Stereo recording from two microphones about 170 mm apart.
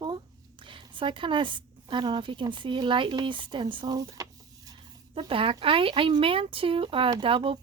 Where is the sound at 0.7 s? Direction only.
30° right (ahead or behind).